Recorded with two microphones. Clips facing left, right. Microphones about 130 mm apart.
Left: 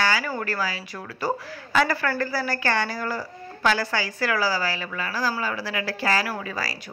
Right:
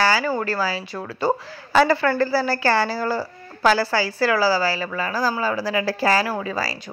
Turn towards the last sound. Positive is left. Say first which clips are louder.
# right 5 dB
turn(degrees=-25)  # may be behind; listen again after turning